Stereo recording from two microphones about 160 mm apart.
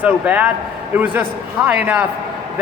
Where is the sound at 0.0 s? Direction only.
10° right (ahead or behind).